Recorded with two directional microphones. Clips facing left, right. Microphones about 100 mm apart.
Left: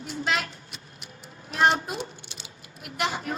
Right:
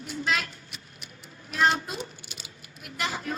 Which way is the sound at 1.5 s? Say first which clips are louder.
Left 2 dB; 25° left (ahead or behind).